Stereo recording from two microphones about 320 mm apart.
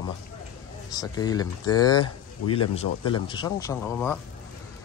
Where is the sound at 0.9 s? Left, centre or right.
Centre.